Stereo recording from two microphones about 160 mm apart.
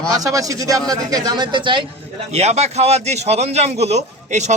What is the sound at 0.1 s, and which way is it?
Speech, 20° right (ahead or behind).